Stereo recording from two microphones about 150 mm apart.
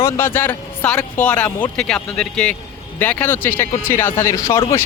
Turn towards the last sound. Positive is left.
turn(degrees=20)  # may be behind; listen again after turning